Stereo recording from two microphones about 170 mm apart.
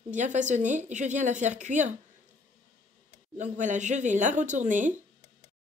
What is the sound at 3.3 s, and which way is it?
A woman's voice, 45° right (ahead or behind).